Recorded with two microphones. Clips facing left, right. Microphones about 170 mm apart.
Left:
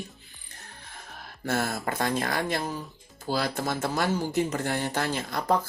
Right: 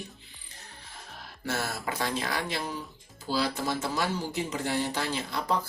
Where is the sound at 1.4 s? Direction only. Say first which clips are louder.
Left 4 dB; 50° left (ahead or behind).